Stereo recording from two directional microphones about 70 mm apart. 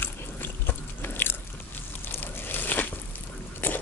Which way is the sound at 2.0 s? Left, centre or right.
Left.